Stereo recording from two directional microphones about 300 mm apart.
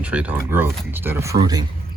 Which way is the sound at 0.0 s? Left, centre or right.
Centre.